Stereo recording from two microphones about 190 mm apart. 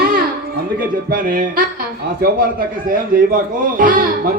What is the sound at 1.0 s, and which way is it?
Speech, 45° right (ahead or behind).